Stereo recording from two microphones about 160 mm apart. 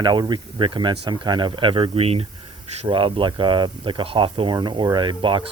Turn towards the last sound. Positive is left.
turn(degrees=-30)  # may be behind; listen again after turning